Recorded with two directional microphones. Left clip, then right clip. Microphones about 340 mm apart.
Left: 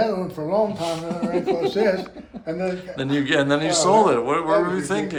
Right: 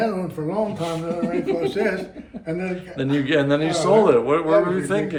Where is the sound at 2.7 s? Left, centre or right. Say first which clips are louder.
Even; centre.